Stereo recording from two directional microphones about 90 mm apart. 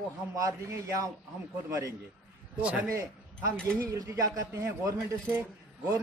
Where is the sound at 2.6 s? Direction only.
15° right (ahead or behind).